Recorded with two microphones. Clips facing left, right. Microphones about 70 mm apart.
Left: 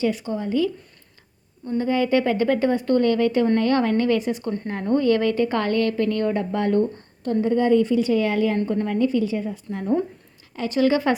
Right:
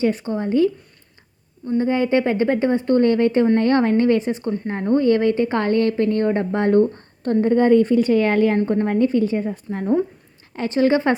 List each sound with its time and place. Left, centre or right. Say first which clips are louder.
0.0 s a woman's voice: right 3 dB; right
1.8 s a woman's voice: right 1 dB; right
6.9 s a woman's voice: right 4 dB; right